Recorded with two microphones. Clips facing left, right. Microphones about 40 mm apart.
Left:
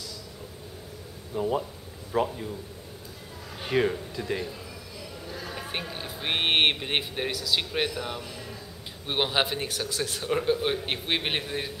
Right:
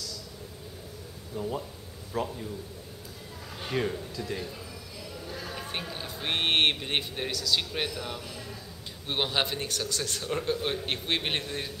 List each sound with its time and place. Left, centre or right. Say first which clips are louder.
1.3 s speech: left 6 dB; left
3.6 s speech: left 5 dB; centre
5.3 s speech: left 2 dB; centre